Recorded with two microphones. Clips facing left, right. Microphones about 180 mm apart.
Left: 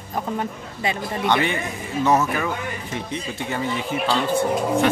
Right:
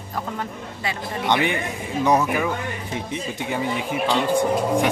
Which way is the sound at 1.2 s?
15° right (ahead or behind).